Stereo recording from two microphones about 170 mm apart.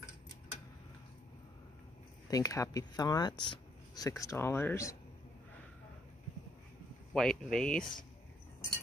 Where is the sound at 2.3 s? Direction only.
20° left (ahead or behind).